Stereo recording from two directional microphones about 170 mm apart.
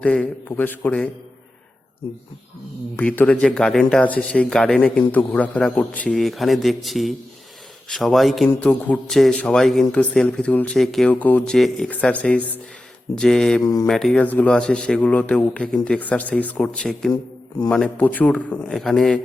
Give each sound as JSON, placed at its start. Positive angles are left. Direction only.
{"t": 0.0, "sound": "speech", "side_deg": 5}
{"t": 2.9, "sound": "speech", "side_deg": 10}